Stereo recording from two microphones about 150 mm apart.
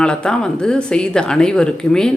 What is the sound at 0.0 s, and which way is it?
Speech, 5° left (ahead or behind).